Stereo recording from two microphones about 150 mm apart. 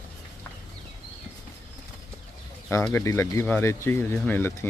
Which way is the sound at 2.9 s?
15° left (ahead or behind).